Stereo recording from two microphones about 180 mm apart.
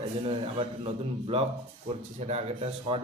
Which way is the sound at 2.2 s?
35° right (ahead or behind).